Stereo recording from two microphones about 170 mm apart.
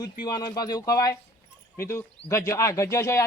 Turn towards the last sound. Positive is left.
turn(degrees=15)  # may be behind; listen again after turning